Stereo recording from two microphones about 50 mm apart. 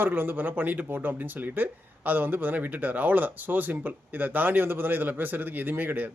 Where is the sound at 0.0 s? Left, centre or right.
Right.